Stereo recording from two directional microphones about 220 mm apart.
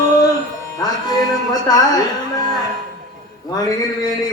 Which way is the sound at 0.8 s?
15° left (ahead or behind).